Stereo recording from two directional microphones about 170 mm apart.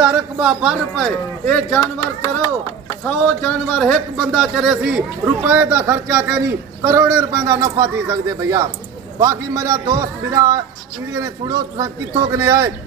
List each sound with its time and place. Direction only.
0.0 s speech: 5° right (ahead or behind)
3.1 s a man's voice: 5° left (ahead or behind); by 12.7 s 15° right (ahead or behind)